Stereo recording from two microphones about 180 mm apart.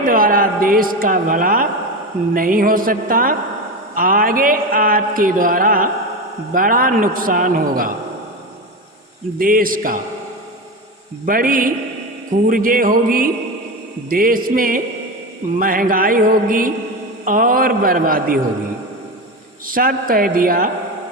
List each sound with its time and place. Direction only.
0.0 s a woman's voice: 50° right (ahead or behind)
2.3 s mantra: 50° right (ahead or behind)
9.4 s mantra: 50° right (ahead or behind)
11.3 s mantra: 50° right (ahead or behind)
19.6 s mantra: 50° right (ahead or behind)